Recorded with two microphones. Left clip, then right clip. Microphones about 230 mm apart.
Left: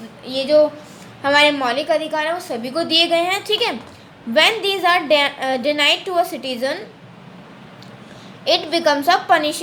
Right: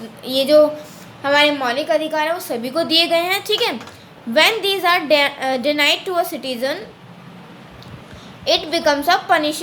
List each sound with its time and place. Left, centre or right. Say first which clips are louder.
0.3 s a woman's voice: right 2 dB; right
1.2 s a woman's voice: left 1 dB; centre
8.4 s a woman's voice: even; centre